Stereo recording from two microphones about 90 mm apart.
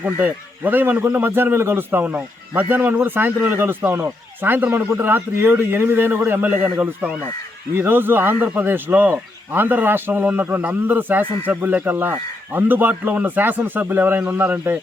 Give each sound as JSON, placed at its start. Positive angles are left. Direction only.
{"t": 0.0, "sound": "a man's voice", "side_deg": -20}